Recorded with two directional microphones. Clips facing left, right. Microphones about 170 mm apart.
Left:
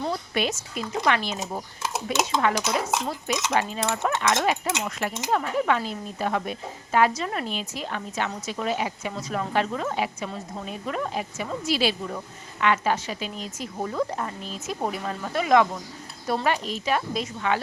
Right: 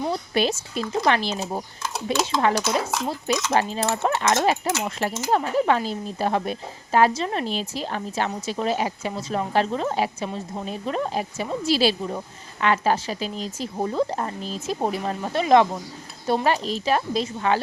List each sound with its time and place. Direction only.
0.1 s speech: 30° right (ahead or behind)